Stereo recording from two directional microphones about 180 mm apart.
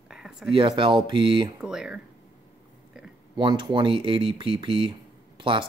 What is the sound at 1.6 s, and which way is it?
Speech, 5° right (ahead or behind).